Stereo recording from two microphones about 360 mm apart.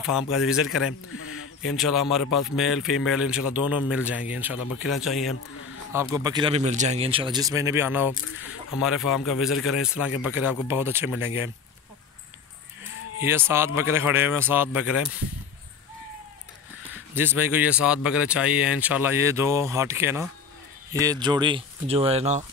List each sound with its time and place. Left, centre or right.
1.0 s a sound: left
1.8 s speech: centre
13.2 s speech: centre
17.1 s speech: centre